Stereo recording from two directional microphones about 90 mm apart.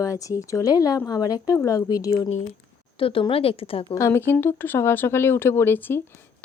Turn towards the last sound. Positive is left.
turn(degrees=25)  # may be behind; listen again after turning